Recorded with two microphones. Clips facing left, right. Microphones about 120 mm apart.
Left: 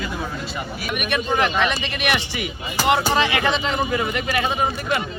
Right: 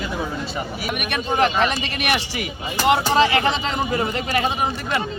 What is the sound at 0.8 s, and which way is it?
Speech, 35° right (ahead or behind).